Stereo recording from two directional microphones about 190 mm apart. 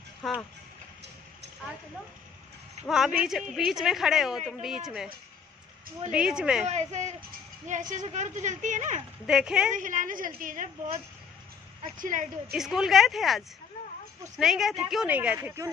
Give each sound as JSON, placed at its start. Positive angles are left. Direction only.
{"t": 0.2, "sound": "speech", "side_deg": 0}
{"t": 2.9, "sound": "speech", "side_deg": -5}
{"t": 6.1, "sound": "speech", "side_deg": -5}
{"t": 6.7, "sound": "speech", "side_deg": -35}
{"t": 9.2, "sound": "speech", "side_deg": -5}
{"t": 9.7, "sound": "a woman's voice", "side_deg": -45}
{"t": 11.8, "sound": "a woman's voice", "side_deg": -45}
{"t": 12.5, "sound": "speech", "side_deg": 0}
{"t": 14.4, "sound": "speech", "side_deg": 0}